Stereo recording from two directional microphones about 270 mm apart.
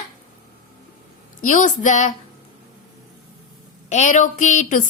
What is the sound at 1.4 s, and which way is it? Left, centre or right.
Speech, left.